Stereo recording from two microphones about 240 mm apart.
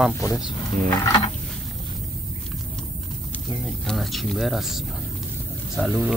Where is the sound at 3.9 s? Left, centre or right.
Centre.